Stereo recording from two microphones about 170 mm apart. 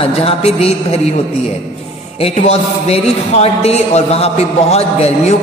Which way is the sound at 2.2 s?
40° left (ahead or behind).